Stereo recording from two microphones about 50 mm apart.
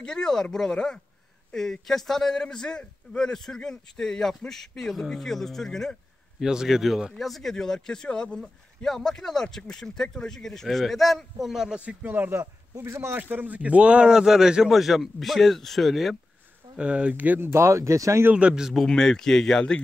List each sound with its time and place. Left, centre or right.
0.0 s a man's voice: centre
6.4 s a man's voice: centre
11.7 s speech: centre
12.0 s speech: right
12.4 s speech: right
13.2 s speech: right
14.1 s a man's voice: centre
16.7 s speech: right
17.1 s speech: right
17.4 s speech: right
18.5 s a man's voice: centre
18.9 s a man's voice: centre